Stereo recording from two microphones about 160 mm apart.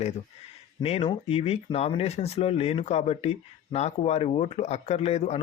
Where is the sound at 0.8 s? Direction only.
35° left (ahead or behind).